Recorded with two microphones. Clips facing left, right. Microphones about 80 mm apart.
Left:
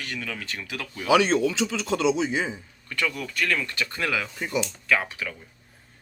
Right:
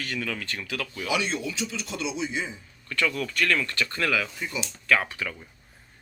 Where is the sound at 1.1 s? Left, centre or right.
Left.